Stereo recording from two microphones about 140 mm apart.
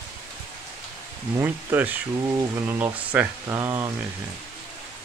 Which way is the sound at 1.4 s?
10° right (ahead or behind).